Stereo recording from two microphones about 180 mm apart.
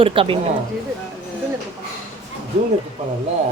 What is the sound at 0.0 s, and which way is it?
Speech, 30° right (ahead or behind).